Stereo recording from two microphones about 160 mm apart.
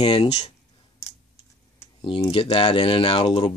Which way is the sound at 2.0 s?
30° left (ahead or behind).